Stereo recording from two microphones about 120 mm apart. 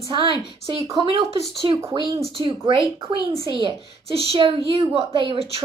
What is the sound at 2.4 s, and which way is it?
Speech, 30° right (ahead or behind).